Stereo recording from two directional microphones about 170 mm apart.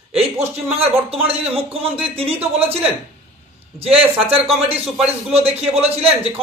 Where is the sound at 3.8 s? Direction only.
35° right (ahead or behind).